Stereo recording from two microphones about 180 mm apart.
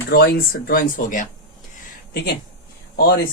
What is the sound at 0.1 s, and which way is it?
Speech, 60° left (ahead or behind).